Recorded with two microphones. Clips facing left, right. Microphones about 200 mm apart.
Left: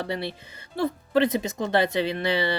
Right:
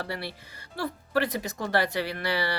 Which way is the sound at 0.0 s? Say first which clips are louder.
Left 5 dB; 20° left (ahead or behind).